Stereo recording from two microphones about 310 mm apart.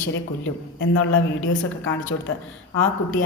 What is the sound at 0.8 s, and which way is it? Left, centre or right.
A woman's voice, left.